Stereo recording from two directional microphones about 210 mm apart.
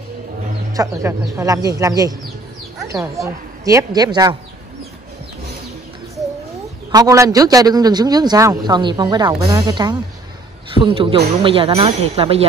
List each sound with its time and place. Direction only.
0.7 s a man's voice: 15° right (ahead or behind)
6.9 s a man's voice: 15° right (ahead or behind)